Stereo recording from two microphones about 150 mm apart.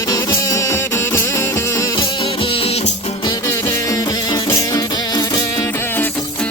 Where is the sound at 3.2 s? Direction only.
25° left (ahead or behind).